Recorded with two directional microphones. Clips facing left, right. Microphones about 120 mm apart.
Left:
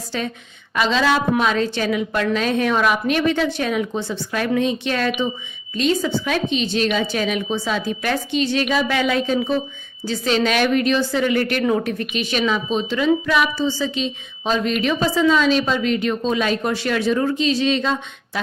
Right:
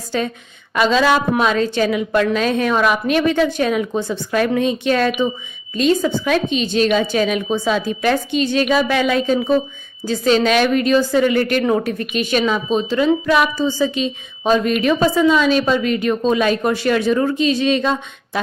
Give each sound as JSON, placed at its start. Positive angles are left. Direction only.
{"t": 0.8, "sound": "a woman's voice", "side_deg": -40}
{"t": 12.1, "sound": "a woman's voice", "side_deg": -45}